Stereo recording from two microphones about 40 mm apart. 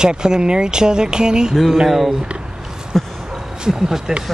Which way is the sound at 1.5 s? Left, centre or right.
Centre.